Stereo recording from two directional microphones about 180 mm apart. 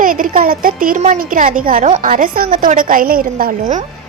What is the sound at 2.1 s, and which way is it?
Speech, 50° right (ahead or behind).